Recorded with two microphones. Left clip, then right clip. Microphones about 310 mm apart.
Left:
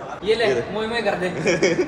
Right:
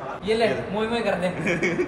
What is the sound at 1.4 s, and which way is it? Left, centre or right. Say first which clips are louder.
Speech: left 8 dB; centre.